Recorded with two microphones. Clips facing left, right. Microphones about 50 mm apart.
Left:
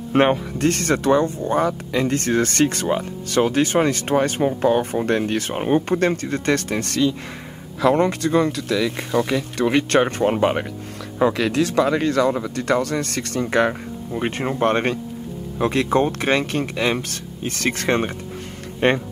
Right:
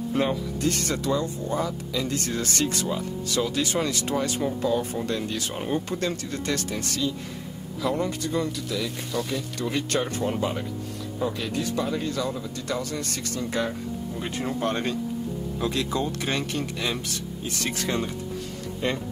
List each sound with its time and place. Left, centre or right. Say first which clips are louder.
0.1 s speech: left 10 dB; left
11.1 s speech: left 10 dB; left